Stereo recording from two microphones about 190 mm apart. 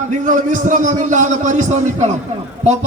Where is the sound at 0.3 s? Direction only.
40° right (ahead or behind).